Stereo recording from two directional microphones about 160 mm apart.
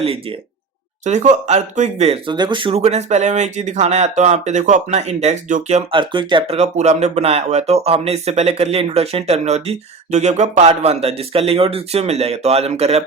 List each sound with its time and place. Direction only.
1.0 s speech: 45° right (ahead or behind)
2.3 s speech: 30° right (ahead or behind); by 6.0 s 45° right (ahead or behind)
6.0 s speech: 30° right (ahead or behind)
6.6 s speech: 45° right (ahead or behind)